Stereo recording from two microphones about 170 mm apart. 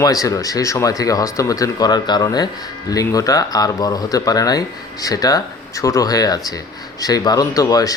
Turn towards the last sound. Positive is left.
turn(degrees=20)  # may be behind; listen again after turning